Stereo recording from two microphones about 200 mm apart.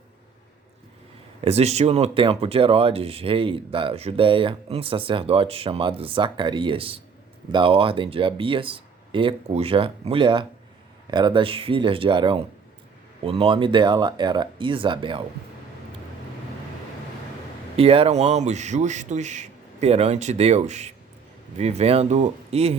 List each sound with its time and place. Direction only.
1.4 s speech: 30° right (ahead or behind)
17.7 s a man's voice: 30° right (ahead or behind)